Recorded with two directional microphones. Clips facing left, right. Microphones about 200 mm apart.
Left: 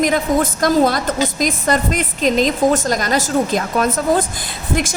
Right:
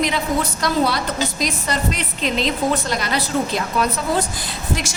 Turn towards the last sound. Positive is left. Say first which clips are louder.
# left 4 dB
turn(degrees=45)  # may be behind; listen again after turning